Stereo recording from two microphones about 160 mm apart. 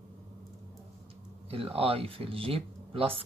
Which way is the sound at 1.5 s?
35° right (ahead or behind).